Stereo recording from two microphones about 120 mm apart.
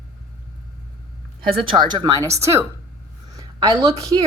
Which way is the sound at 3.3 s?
30° right (ahead or behind).